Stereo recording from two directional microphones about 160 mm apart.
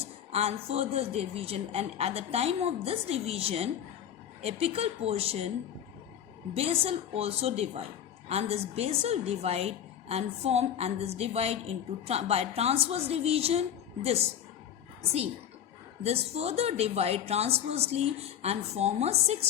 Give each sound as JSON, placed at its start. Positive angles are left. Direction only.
{"t": 0.3, "sound": "a woman's voice", "side_deg": -40}
{"t": 6.5, "sound": "a woman's voice", "side_deg": -40}
{"t": 16.0, "sound": "a woman's voice", "side_deg": -40}